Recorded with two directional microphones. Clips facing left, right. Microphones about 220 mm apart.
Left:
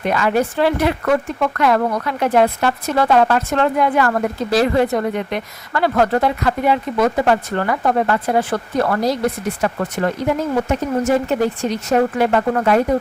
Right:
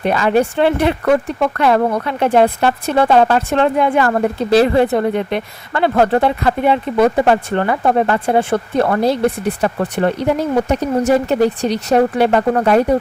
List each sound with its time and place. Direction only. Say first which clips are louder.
0.0 s speech: right 3 dB; 30° right (ahead or behind)